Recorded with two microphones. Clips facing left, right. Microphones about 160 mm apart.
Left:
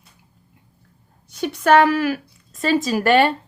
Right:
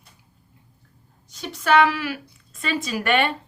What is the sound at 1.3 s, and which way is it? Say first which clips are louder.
Speech: left 5 dB; 60° left (ahead or behind).